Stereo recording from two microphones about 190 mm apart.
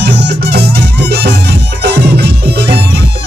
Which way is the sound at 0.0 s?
60° right (ahead or behind).